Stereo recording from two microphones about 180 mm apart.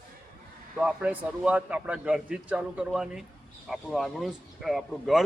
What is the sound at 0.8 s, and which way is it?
Speech, 5° right (ahead or behind).